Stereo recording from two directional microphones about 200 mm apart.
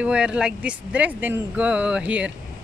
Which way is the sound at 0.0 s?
5° right (ahead or behind).